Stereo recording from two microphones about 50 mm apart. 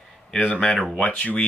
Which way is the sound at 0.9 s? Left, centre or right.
Left.